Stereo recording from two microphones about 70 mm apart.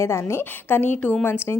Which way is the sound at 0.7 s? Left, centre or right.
Left.